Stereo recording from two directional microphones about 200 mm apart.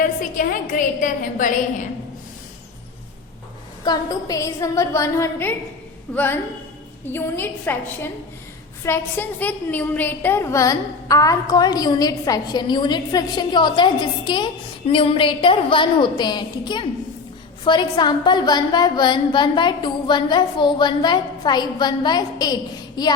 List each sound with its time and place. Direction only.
0.0 s a woman's voice: 45° left (ahead or behind)
3.8 s a woman's voice: 15° left (ahead or behind)